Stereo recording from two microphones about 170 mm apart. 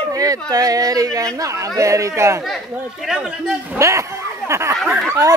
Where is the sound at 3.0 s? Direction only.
5° right (ahead or behind).